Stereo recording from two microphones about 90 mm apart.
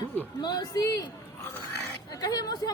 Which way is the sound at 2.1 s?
45° left (ahead or behind).